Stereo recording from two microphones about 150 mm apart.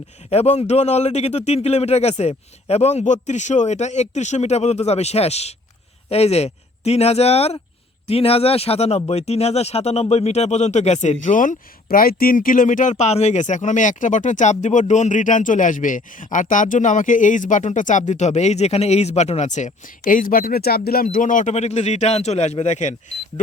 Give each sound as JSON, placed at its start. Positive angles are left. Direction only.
{"t": 0.3, "sound": "speech", "side_deg": 45}